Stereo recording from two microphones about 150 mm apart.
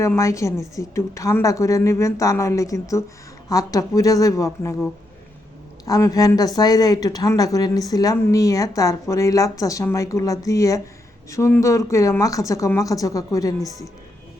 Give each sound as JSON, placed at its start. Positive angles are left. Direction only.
{"t": 0.0, "sound": "a woman's voice", "side_deg": 20}
{"t": 5.8, "sound": "a woman's voice", "side_deg": 25}